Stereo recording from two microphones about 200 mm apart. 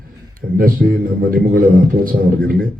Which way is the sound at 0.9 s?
45° right (ahead or behind).